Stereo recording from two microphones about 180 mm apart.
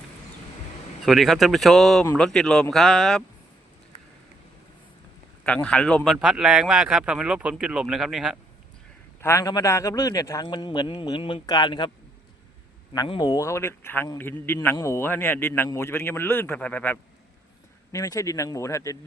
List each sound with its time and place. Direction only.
1.0 s a man's voice: centre (ahead or behind)
5.4 s a man's voice: 5° left (ahead or behind)
9.2 s a man's voice: 15° left (ahead or behind)
12.9 s a man's voice: 25° left (ahead or behind)